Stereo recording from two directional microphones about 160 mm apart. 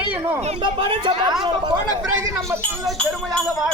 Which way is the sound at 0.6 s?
30° right (ahead or behind).